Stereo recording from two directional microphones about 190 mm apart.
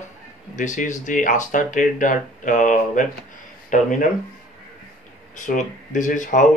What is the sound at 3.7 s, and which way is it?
Music, 40° left (ahead or behind).